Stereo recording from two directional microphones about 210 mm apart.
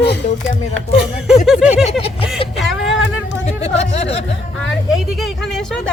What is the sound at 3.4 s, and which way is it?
Speech, 30° left (ahead or behind).